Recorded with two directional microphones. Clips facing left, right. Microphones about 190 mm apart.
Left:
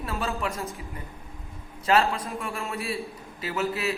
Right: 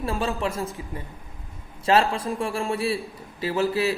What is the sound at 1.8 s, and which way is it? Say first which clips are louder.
A man's voice: right 2 dB; 30° right (ahead or behind).